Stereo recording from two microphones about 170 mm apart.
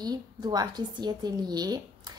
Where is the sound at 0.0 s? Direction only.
25° right (ahead or behind).